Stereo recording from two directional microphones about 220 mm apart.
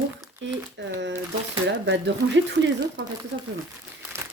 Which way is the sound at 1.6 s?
55° right (ahead or behind).